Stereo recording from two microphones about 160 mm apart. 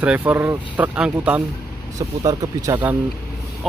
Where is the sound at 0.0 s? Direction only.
10° right (ahead or behind).